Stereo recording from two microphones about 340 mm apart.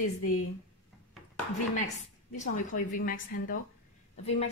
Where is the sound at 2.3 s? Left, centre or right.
Left.